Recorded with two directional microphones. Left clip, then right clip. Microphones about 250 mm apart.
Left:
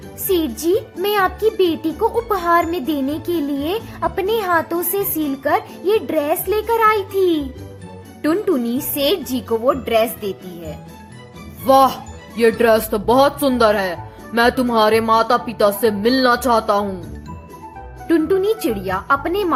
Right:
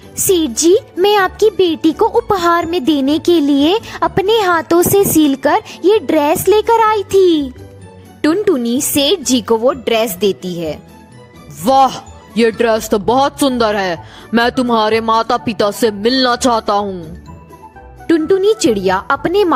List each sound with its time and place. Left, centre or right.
0.3 s speech: right
18.1 s speech: right